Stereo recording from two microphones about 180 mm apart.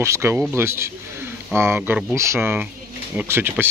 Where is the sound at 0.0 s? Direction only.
15° right (ahead or behind).